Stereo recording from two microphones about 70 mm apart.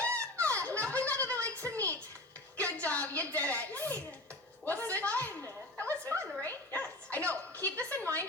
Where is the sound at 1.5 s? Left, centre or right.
Right.